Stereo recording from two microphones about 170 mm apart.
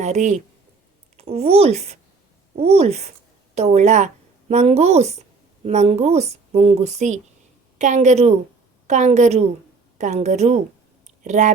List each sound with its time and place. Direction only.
0.0 s a woman's voice: 45° right (ahead or behind)
11.0 s clicking: 45° right (ahead or behind)